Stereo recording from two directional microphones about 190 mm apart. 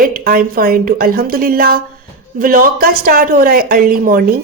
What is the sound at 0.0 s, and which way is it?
Speech, 50° right (ahead or behind).